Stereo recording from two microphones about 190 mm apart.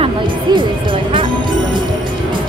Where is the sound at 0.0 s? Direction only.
25° right (ahead or behind).